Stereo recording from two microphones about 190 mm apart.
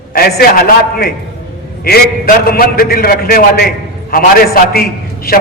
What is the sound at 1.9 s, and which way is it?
A man's voice, 55° left (ahead or behind).